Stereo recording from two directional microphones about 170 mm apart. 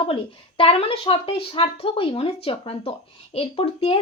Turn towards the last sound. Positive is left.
turn(degrees=35)  # may be behind; listen again after turning